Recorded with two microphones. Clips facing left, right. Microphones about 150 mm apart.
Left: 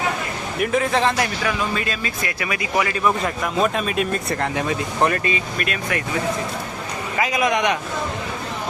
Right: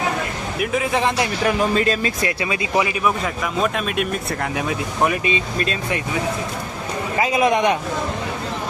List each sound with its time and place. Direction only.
0.6 s speech: 5° right (ahead or behind)
1.5 s speech: 30° right (ahead or behind)
3.0 s speech: centre (ahead or behind)
5.2 s speech: 25° right (ahead or behind)
7.2 s speech: 25° right (ahead or behind)